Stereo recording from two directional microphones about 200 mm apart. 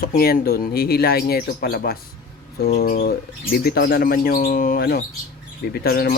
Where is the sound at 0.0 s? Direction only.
45° left (ahead or behind).